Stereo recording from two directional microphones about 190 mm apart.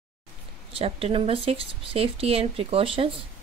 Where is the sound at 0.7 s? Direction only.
30° right (ahead or behind).